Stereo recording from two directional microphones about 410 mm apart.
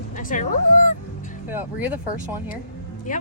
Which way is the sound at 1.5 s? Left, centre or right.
Centre.